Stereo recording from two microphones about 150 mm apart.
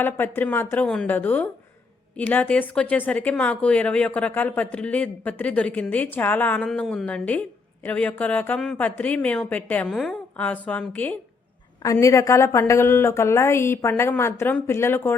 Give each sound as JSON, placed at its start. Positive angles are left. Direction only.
{"t": 0.0, "sound": "speech", "side_deg": 15}
{"t": 11.8, "sound": "speech", "side_deg": 20}